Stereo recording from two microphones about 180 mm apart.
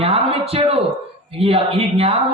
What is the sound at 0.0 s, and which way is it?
A man's voice, 30° right (ahead or behind).